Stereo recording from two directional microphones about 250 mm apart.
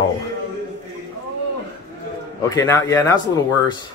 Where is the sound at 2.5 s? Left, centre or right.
Centre.